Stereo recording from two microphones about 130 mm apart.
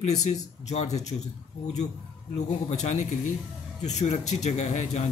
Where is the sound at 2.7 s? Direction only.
60° left (ahead or behind).